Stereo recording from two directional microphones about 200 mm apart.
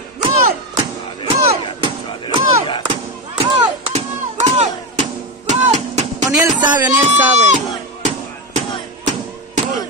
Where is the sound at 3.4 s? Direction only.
30° right (ahead or behind).